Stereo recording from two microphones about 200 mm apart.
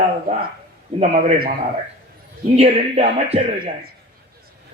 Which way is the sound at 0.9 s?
45° right (ahead or behind).